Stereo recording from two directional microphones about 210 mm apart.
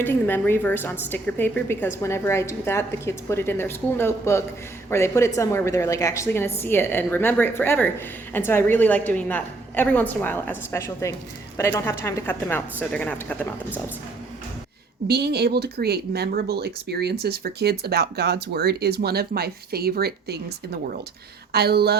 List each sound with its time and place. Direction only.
0.0 s a woman's voice: 10° left (ahead or behind)
15.0 s speech: 50° right (ahead or behind)
21.5 s speech: 50° right (ahead or behind)